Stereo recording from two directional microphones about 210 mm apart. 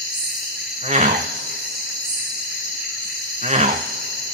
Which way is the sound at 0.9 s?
35° right (ahead or behind).